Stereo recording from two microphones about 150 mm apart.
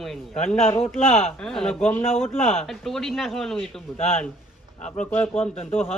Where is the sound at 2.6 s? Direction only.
Centre (ahead or behind).